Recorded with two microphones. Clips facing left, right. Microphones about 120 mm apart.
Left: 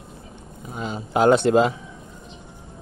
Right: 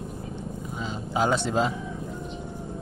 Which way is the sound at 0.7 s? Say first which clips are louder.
Left 6 dB; 60° left (ahead or behind).